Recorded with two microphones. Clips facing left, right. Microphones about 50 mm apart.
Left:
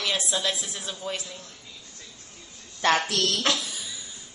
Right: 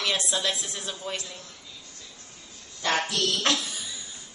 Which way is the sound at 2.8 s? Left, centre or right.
Left.